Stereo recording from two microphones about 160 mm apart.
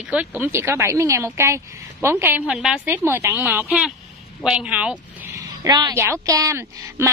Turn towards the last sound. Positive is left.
turn(degrees=-20)  # may be behind; listen again after turning